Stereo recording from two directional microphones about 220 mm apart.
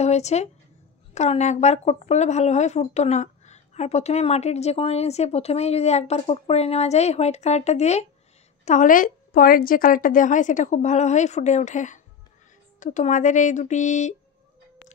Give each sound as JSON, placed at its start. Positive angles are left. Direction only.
{"t": 0.0, "sound": "a woman's voice", "side_deg": 30}